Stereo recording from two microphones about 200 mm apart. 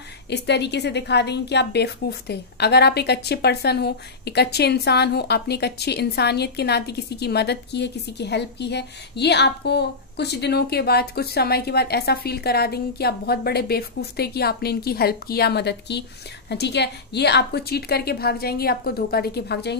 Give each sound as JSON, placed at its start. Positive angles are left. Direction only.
{"t": 0.3, "sound": "a woman's voice", "side_deg": 55}